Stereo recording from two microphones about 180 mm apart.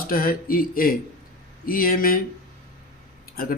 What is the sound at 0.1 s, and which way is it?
Speech, 50° left (ahead or behind).